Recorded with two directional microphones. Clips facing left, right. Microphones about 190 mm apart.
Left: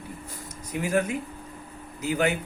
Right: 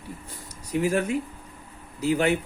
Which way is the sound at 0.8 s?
30° right (ahead or behind).